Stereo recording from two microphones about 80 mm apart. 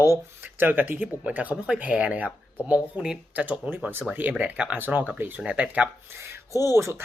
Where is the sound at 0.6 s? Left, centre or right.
Right.